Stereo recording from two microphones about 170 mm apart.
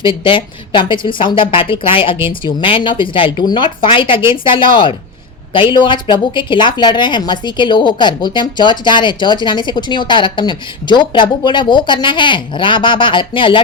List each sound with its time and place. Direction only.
0.0 s a woman's voice: 30° left (ahead or behind)